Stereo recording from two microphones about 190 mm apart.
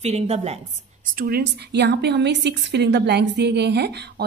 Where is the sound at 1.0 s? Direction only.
50° right (ahead or behind).